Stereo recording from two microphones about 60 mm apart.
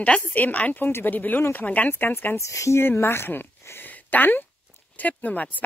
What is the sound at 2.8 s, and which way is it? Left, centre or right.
Speech, left.